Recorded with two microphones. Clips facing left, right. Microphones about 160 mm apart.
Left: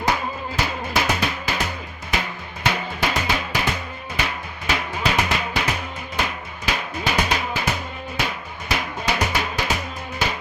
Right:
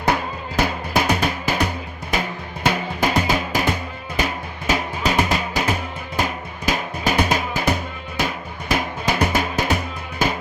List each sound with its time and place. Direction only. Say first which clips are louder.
0.1 s music: right 5 dB; 55° right (ahead or behind)
3.0 s music: right 5 dB; 45° right (ahead or behind)
4.2 s drum: right 4 dB; 45° right (ahead or behind)
4.7 s music: right 2 dB; 45° right (ahead or behind)